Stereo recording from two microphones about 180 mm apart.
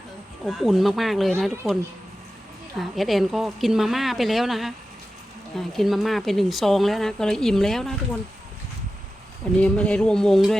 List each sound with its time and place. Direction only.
0.4 s speech: centre (ahead or behind)
9.6 s speech: 5° left (ahead or behind)